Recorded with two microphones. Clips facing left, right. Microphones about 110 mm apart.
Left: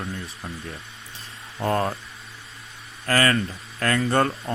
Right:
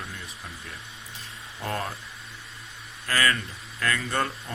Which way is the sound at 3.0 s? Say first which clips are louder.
Left 5 dB; 45° left (ahead or behind).